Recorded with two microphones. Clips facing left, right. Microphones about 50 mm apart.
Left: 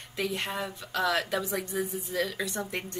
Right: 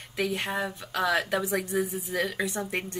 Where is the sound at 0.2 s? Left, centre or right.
Centre.